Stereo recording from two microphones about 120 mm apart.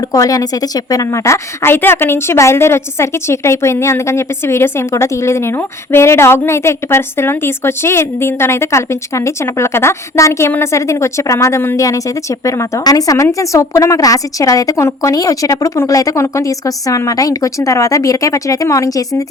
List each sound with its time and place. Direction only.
0.0 s a woman's voice: 30° left (ahead or behind)